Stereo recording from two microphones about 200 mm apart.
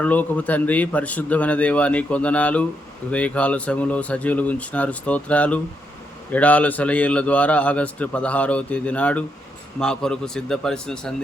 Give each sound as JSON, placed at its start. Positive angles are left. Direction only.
{"t": 0.0, "sound": "a man's voice", "side_deg": 5}